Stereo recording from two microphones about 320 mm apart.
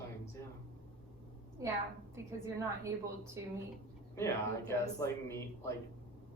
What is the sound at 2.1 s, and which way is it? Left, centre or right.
Speech, centre.